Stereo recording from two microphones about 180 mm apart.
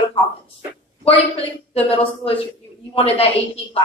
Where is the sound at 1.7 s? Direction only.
30° left (ahead or behind).